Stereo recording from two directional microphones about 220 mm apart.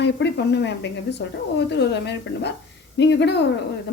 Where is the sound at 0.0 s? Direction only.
50° left (ahead or behind).